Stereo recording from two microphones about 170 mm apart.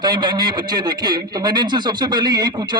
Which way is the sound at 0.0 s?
25° right (ahead or behind).